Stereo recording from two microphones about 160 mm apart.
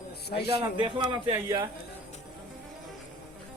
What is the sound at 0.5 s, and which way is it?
A man's voice, 30° right (ahead or behind).